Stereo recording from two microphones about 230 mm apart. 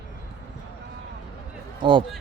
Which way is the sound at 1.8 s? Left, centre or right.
Right.